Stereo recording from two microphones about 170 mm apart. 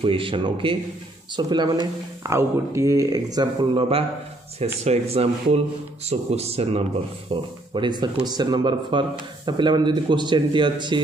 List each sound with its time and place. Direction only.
0.0 s speech: 30° right (ahead or behind)
4.8 s speech: 35° right (ahead or behind)